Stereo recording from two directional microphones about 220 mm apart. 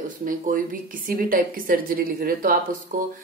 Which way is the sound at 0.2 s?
40° right (ahead or behind).